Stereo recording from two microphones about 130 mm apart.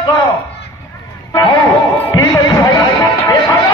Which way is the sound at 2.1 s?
35° left (ahead or behind).